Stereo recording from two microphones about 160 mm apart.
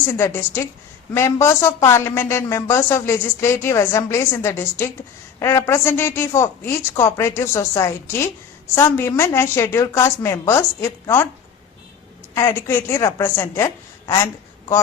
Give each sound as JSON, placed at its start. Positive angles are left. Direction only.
{"t": 0.1, "sound": "speech", "side_deg": 15}
{"t": 12.3, "sound": "speech", "side_deg": 15}